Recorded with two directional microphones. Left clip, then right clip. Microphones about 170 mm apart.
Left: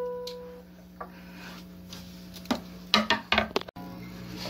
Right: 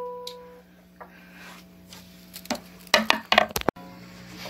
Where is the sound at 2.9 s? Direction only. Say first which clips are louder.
Right 4 dB; 55° right (ahead or behind).